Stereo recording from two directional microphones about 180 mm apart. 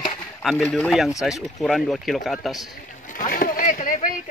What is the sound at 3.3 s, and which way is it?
Boat, 50° left (ahead or behind).